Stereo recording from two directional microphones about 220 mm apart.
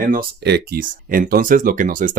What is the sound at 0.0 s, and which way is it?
Speech, 40° right (ahead or behind).